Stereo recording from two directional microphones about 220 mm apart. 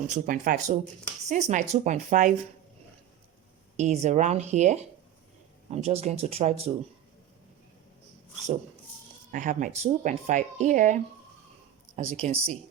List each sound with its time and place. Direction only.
0.1 s speech: 35° right (ahead or behind)
3.8 s speech: 30° right (ahead or behind)
9.3 s speech: 35° right (ahead or behind)
11.9 s speech: 30° right (ahead or behind)